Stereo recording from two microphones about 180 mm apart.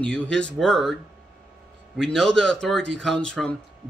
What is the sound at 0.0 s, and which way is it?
Speech, 5° left (ahead or behind).